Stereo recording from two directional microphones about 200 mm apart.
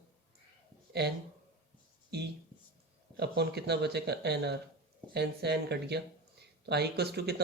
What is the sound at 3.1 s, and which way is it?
Speech, 55° right (ahead or behind).